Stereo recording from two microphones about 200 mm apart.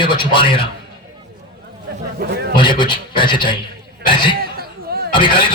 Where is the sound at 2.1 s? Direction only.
55° right (ahead or behind).